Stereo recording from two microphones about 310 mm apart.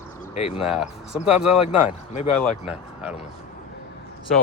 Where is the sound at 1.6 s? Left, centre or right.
Left.